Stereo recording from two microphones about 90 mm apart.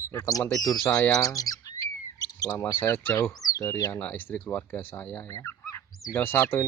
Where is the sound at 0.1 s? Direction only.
40° left (ahead or behind).